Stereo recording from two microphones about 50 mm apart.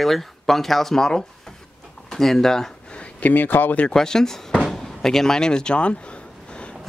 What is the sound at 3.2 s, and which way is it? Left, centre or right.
Speech, left.